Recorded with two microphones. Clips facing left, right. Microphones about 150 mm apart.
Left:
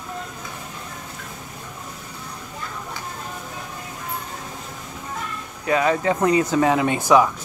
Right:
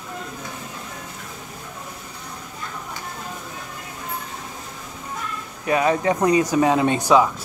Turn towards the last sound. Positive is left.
turn(degrees=-15)  # may be behind; listen again after turning